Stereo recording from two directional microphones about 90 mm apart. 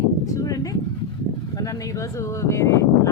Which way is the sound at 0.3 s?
40° left (ahead or behind).